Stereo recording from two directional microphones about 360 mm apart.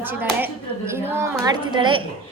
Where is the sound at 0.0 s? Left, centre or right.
Centre.